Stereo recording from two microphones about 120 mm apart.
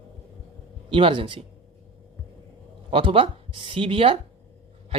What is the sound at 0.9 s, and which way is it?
Speech, 45° right (ahead or behind).